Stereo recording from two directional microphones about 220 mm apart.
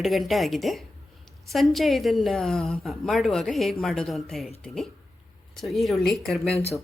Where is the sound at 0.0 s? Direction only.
Centre (ahead or behind).